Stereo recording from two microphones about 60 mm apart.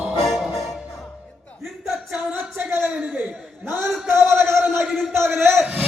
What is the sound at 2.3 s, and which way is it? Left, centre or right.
Music, right.